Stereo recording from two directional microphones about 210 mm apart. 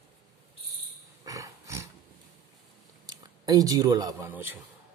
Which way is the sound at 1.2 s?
15° right (ahead or behind).